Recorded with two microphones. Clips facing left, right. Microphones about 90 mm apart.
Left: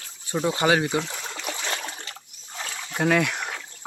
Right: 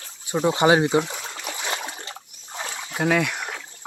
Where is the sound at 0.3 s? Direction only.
15° right (ahead or behind).